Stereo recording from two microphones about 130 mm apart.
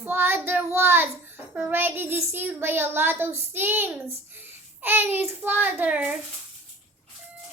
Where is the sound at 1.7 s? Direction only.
15° right (ahead or behind).